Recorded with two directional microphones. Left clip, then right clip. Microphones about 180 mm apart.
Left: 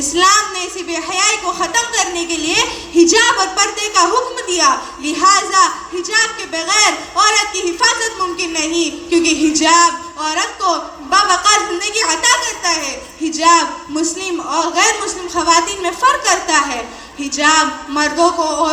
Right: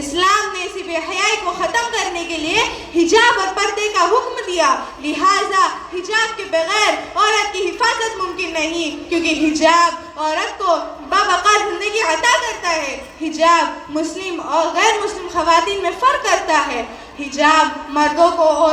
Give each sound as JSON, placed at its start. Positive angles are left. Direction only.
{"t": 0.2, "sound": "a woman's voice", "side_deg": -35}